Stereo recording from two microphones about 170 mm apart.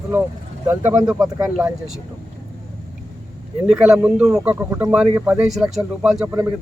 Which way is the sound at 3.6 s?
5° right (ahead or behind).